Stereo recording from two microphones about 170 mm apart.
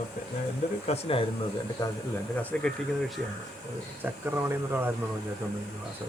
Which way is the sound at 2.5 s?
5° left (ahead or behind).